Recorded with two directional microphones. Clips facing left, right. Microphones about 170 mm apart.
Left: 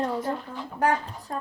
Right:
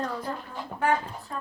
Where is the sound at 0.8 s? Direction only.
40° left (ahead or behind).